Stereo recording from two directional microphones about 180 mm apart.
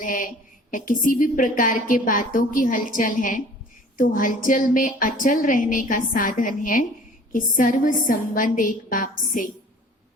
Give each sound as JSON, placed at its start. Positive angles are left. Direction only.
{"t": 0.0, "sound": "a woman's voice", "side_deg": 50}